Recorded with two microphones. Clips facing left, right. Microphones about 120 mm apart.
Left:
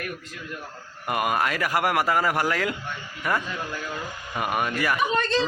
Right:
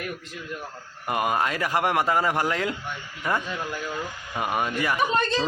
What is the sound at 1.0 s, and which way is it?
A man's voice, 25° right (ahead or behind).